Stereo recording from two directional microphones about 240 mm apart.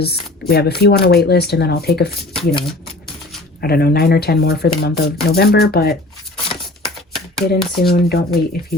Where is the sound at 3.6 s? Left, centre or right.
Left.